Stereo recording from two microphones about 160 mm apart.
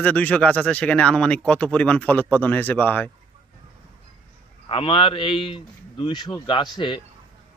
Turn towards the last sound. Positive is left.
turn(degrees=30)  # may be behind; listen again after turning